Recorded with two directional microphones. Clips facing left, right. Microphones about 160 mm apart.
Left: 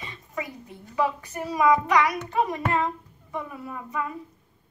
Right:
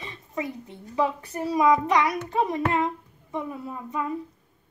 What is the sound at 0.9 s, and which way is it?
Speech, 30° right (ahead or behind).